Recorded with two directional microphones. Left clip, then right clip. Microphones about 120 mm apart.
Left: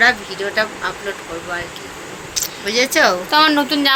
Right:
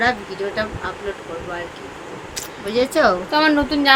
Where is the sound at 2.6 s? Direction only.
55° right (ahead or behind).